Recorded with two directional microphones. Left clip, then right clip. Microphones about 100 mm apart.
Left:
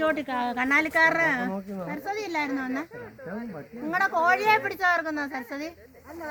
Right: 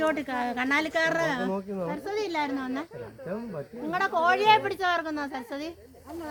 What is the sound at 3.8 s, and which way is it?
A woman's voice, 55° left (ahead or behind).